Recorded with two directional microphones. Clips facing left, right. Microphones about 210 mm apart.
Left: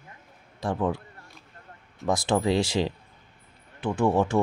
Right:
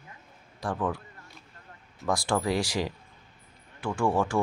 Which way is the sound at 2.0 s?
20° left (ahead or behind).